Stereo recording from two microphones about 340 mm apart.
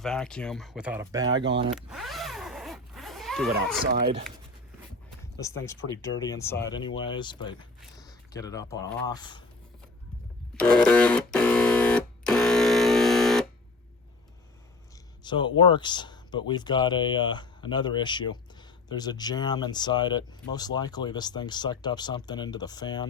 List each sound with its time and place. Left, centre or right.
0.0 s speech: centre
1.9 s zipper: centre
3.9 s speech: right
5.9 s speech: centre
10.6 s a sound: centre
15.2 s speech: centre